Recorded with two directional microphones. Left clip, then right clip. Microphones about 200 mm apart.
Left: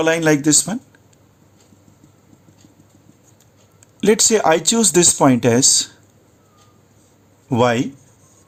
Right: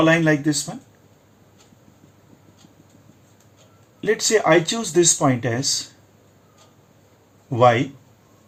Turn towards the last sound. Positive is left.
turn(degrees=70)  # may be behind; listen again after turning